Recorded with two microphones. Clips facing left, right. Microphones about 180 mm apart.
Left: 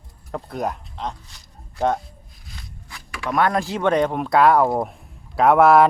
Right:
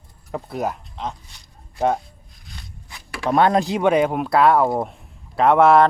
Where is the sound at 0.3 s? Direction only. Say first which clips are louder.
Right 1 dB; 5° right (ahead or behind).